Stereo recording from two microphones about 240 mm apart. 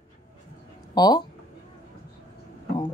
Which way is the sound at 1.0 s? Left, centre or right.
Centre.